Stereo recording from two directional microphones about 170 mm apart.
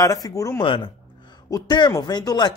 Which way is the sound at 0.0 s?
20° left (ahead or behind).